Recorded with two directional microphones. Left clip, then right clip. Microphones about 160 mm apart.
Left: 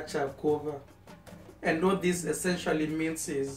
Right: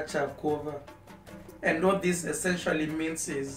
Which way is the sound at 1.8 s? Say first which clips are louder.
Right 2 dB; 15° right (ahead or behind).